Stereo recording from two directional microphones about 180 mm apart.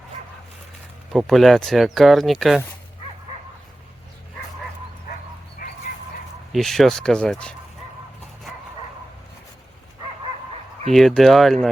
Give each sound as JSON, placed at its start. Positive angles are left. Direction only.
{"t": 1.1, "sound": "speech", "side_deg": 0}
{"t": 5.6, "sound": "dog", "side_deg": 50}
{"t": 6.5, "sound": "speech", "side_deg": 0}
{"t": 10.9, "sound": "speech", "side_deg": 0}